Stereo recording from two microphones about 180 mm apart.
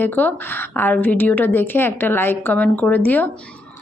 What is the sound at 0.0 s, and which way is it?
A woman's voice, 10° left (ahead or behind).